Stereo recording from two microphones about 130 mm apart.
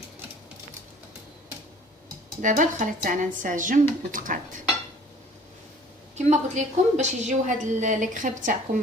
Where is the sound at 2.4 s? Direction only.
75° right (ahead or behind).